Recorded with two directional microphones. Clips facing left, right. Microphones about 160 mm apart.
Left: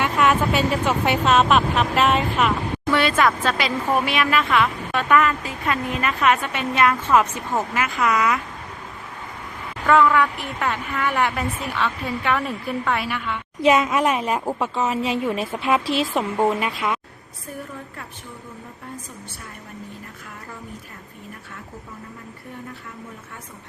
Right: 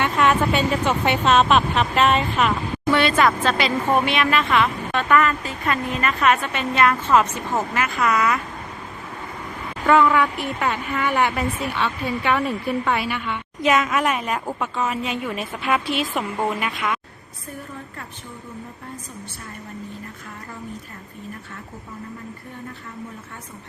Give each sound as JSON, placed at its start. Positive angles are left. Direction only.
{"t": 0.0, "sound": "speech", "side_deg": 5}
{"t": 9.9, "sound": "speech", "side_deg": -5}
{"t": 13.6, "sound": "a woman's voice", "side_deg": 30}